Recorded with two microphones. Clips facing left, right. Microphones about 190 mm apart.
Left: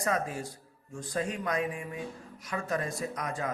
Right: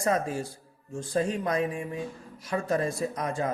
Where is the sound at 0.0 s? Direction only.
30° right (ahead or behind).